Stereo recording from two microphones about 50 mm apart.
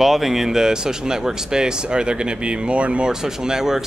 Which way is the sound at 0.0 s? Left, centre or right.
Centre.